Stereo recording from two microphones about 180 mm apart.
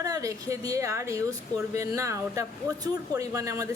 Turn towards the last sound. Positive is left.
turn(degrees=-15)  # may be behind; listen again after turning